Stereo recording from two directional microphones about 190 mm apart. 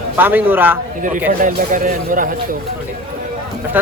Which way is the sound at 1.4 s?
45° right (ahead or behind).